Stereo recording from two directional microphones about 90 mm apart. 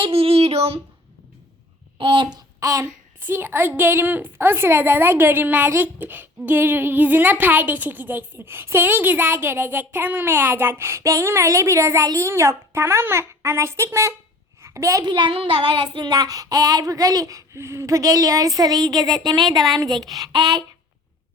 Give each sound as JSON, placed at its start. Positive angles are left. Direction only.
{"t": 0.0, "sound": "speech", "side_deg": -90}
{"t": 2.0, "sound": "speech", "side_deg": -70}
{"t": 2.2, "sound": "speech", "side_deg": -40}
{"t": 3.2, "sound": "a woman's voice", "side_deg": -25}
{"t": 14.6, "sound": "a sound", "side_deg": -35}
{"t": 15.0, "sound": "child singing", "side_deg": -60}